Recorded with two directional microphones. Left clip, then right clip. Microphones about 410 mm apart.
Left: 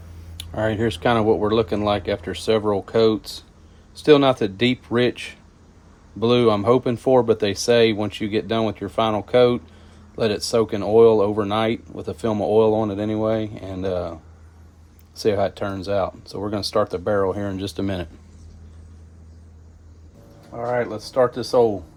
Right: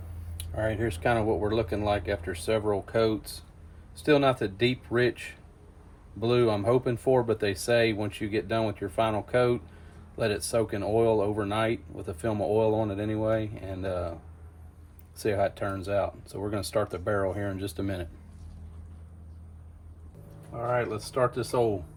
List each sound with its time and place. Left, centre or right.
0.3 s speech: centre
15.1 s speech: centre
20.6 s speech: centre